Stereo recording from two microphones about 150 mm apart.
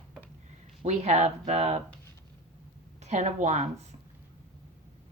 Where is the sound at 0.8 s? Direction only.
50° right (ahead or behind).